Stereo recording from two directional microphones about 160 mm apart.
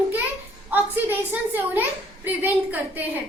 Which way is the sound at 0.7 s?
10° right (ahead or behind).